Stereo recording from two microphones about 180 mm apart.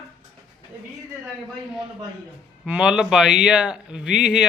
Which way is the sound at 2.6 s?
5° right (ahead or behind).